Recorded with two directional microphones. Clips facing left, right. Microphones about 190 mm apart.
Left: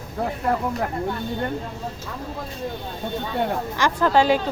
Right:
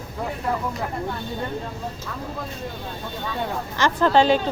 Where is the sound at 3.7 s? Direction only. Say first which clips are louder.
Right 2 dB; 10° left (ahead or behind).